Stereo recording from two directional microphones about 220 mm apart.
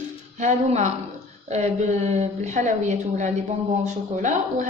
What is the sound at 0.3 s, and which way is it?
A woman's voice, 30° right (ahead or behind).